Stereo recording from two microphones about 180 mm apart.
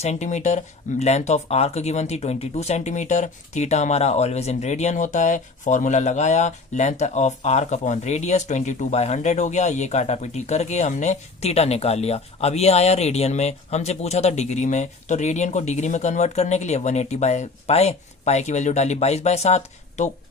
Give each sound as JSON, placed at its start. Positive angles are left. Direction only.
{"t": 0.0, "sound": "speech", "side_deg": 40}